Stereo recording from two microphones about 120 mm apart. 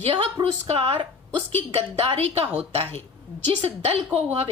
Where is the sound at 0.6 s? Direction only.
55° right (ahead or behind).